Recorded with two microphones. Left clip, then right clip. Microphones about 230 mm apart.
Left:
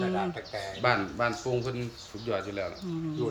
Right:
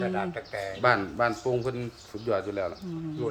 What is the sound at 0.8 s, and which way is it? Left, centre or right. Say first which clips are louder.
Speech: right 3 dB; right.